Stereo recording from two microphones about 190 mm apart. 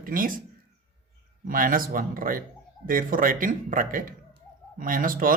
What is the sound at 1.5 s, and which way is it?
Speech, 45° right (ahead or behind).